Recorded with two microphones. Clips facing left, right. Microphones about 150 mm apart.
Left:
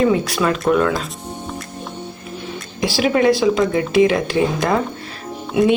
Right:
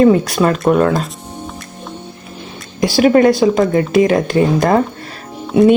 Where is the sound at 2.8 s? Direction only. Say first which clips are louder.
Right 5 dB; 45° right (ahead or behind).